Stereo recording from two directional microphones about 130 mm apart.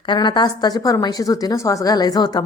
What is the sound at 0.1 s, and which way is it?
A woman's voice, 35° left (ahead or behind).